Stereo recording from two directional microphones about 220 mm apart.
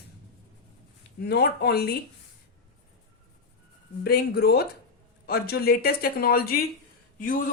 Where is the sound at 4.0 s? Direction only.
45° left (ahead or behind).